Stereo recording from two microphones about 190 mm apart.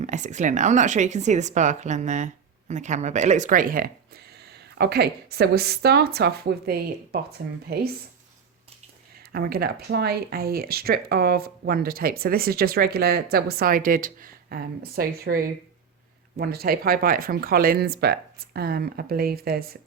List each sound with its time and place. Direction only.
0.0 s speech: 40° right (ahead or behind); by 7.8 s 55° right (ahead or behind)
9.3 s speech: 55° right (ahead or behind)
16.4 s speech: 55° right (ahead or behind)